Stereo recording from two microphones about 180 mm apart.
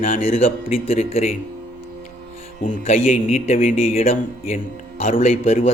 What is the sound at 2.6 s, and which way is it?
Speech, 40° left (ahead or behind).